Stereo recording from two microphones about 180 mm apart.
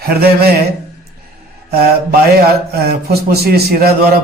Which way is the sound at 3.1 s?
60° right (ahead or behind).